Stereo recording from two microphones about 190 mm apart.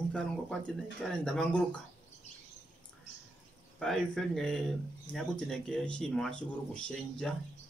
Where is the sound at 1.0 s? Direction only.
5° left (ahead or behind).